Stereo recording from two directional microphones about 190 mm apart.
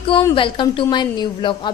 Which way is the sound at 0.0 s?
25° left (ahead or behind).